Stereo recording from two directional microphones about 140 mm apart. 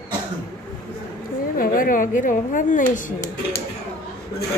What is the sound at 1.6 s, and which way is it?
Speech, 80° left.